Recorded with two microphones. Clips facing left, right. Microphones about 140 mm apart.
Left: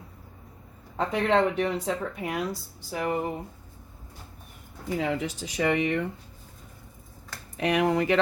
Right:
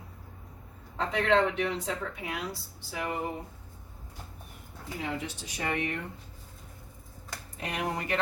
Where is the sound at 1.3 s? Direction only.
40° left (ahead or behind).